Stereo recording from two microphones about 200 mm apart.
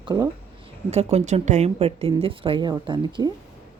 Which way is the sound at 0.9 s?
30° right (ahead or behind).